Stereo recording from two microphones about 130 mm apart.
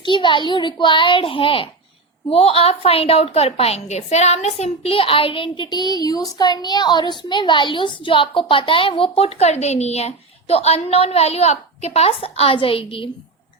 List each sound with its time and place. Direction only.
0.0 s a child's voice: 40° left (ahead or behind)